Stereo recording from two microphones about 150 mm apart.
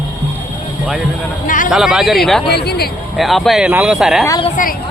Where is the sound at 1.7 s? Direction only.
Centre (ahead or behind).